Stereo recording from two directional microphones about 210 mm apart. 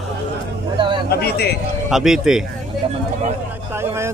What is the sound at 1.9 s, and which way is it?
Speech, centre (ahead or behind).